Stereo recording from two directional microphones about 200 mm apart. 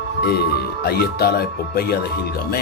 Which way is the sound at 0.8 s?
50° left (ahead or behind).